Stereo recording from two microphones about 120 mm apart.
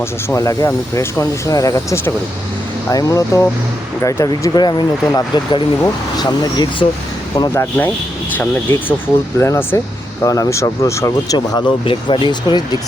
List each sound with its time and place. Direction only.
0.0 s speech: 25° left (ahead or behind)
7.5 s speech: 20° left (ahead or behind)
9.4 s speech: 20° left (ahead or behind)
11.3 s speech: 40° left (ahead or behind)